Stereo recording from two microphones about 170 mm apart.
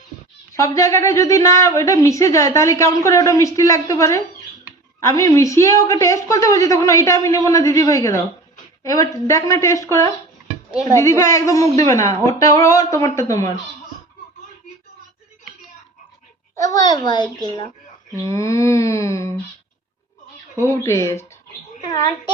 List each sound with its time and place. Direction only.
0.5 s a woman's voice: 20° left (ahead or behind)
16.6 s a woman's voice: 20° left (ahead or behind)
20.6 s a woman's voice: 15° left (ahead or behind)